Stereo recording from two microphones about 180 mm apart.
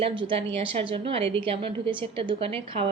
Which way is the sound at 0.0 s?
30° right (ahead or behind).